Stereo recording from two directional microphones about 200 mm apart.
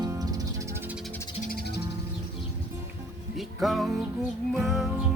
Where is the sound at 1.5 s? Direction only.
55° left (ahead or behind).